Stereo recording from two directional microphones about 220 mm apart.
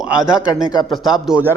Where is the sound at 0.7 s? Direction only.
20° left (ahead or behind).